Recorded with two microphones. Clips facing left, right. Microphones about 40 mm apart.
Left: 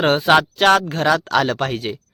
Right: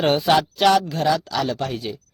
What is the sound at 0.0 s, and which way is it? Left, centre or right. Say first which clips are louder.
Speech: left 3 dB; left.